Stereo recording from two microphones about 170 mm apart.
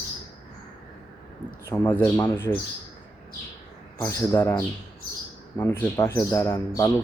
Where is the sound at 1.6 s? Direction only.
15° left (ahead or behind).